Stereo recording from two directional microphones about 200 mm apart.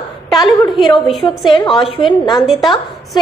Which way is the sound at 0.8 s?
25° left (ahead or behind).